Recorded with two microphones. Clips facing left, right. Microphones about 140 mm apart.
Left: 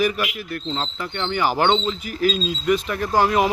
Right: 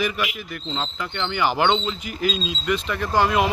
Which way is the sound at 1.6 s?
30° left (ahead or behind).